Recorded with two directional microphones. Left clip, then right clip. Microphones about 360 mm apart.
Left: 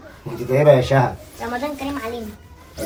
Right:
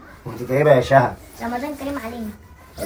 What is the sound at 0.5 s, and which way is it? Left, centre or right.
Speech, centre.